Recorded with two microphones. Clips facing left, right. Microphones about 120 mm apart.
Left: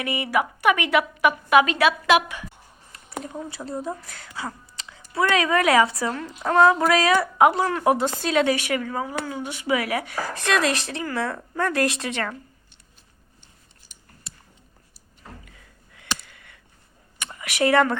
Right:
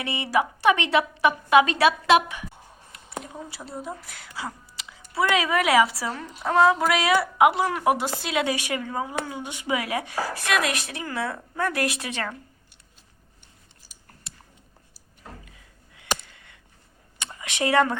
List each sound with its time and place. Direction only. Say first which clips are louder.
0.0 s a woman's voice: left 1 dB; 25° right (ahead or behind)
3.6 s a woman's voice: left 5 dB; 5° right (ahead or behind)
4.4 s a woman's voice: left 1 dB; 15° right (ahead or behind)
15.4 s a sound: left 1 dB; 20° right (ahead or behind)
17.3 s speech: left 2 dB; 25° right (ahead or behind)